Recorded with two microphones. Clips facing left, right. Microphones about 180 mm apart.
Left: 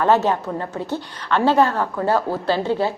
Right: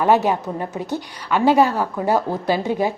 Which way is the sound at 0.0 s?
10° right (ahead or behind).